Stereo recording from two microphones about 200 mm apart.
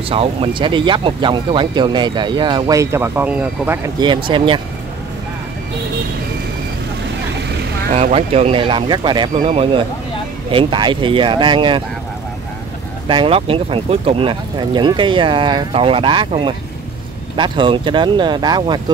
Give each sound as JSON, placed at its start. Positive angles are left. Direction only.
{"t": 0.1, "sound": "speech", "side_deg": -25}
{"t": 4.0, "sound": "speech", "side_deg": -25}
{"t": 7.9, "sound": "speech", "side_deg": -30}
{"t": 13.1, "sound": "speech", "side_deg": -25}